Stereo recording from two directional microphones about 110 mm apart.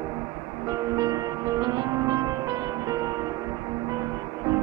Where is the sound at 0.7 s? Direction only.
35° right (ahead or behind).